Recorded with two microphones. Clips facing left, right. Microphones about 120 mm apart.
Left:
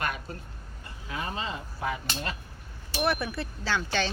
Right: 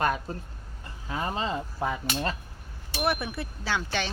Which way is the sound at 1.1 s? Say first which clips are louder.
Right 4 dB; 35° right (ahead or behind).